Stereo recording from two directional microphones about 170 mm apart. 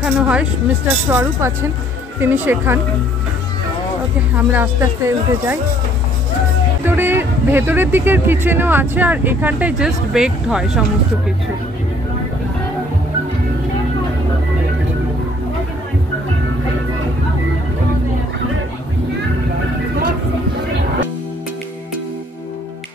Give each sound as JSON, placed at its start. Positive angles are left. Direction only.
{"t": 0.0, "sound": "speech", "side_deg": -5}
{"t": 4.4, "sound": "speech", "side_deg": -10}
{"t": 6.8, "sound": "speech", "side_deg": -10}